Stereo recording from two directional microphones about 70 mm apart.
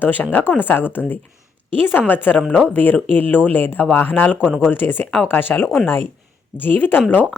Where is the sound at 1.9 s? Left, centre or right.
Left.